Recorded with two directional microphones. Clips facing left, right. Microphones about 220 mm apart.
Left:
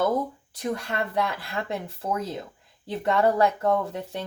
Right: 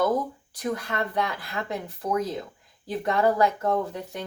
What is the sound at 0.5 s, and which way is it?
Speech, 25° left (ahead or behind).